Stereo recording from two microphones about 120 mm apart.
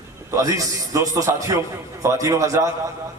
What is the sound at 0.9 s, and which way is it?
A man's voice, 25° right (ahead or behind).